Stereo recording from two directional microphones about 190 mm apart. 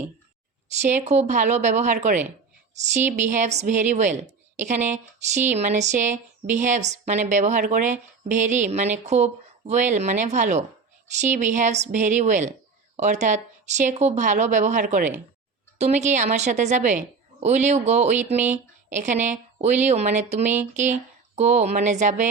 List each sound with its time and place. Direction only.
0.8 s speech: 40° right (ahead or behind)